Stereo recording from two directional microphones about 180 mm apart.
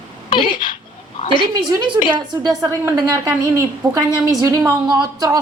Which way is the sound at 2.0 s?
20° right (ahead or behind).